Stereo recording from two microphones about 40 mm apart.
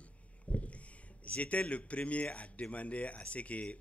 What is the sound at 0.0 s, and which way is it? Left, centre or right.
Speech, left.